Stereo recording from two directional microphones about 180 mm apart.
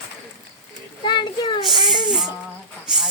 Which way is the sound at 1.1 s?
25° left (ahead or behind).